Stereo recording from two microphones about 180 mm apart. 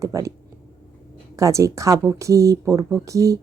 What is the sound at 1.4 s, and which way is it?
A woman's voice, 15° right (ahead or behind).